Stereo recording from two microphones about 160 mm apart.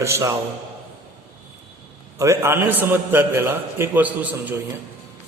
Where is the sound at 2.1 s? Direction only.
20° right (ahead or behind).